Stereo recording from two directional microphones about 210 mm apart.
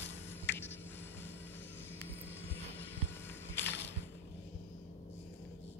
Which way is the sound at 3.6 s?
55° left (ahead or behind).